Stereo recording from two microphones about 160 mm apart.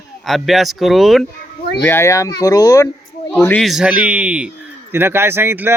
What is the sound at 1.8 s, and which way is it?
A child's voice, 15° left (ahead or behind).